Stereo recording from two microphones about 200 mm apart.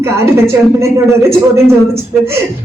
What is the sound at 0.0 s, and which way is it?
Speech, 15° right (ahead or behind).